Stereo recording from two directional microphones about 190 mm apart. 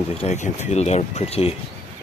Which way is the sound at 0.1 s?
35° left (ahead or behind).